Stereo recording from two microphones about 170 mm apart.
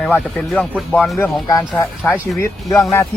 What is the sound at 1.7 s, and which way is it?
Speech, 10° left (ahead or behind).